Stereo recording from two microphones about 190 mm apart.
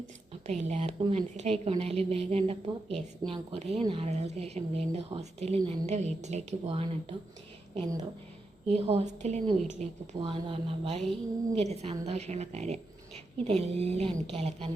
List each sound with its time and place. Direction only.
0.4 s a woman's voice: 35° right (ahead or behind)
8.6 s a woman's voice: 35° right (ahead or behind)
11.0 s a woman's voice: 5° left (ahead or behind)
11.6 s a woman's voice: 35° right (ahead or behind)